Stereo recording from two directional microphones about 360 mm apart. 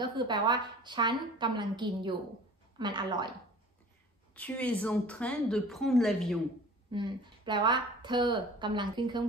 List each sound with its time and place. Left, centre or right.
0.0 s a woman's voice: centre
4.3 s a woman's voice: centre
6.9 s a woman's voice: centre